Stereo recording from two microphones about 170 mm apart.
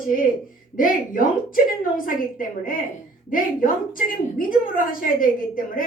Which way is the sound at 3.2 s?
55° left (ahead or behind).